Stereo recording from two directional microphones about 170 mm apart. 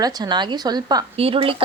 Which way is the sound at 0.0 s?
25° right (ahead or behind).